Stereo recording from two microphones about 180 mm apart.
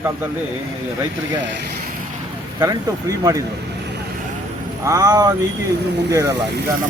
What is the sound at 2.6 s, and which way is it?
Speech, 20° right (ahead or behind).